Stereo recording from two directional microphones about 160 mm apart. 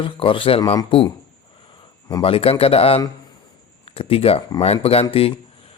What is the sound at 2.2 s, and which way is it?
A man's voice, 35° left (ahead or behind).